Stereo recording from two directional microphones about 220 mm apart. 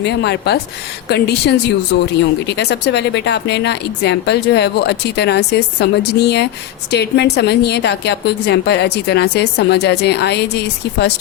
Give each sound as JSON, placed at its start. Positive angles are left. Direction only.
{"t": 0.0, "sound": "a woman's voice", "side_deg": 50}
{"t": 2.6, "sound": "a woman's voice", "side_deg": 50}